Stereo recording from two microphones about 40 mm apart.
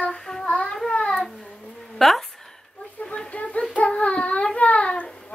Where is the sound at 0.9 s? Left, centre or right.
Left.